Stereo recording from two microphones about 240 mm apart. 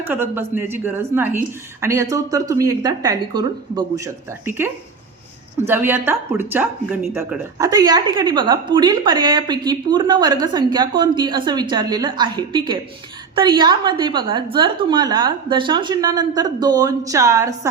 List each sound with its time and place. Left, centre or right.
0.0 s a woman's voice: centre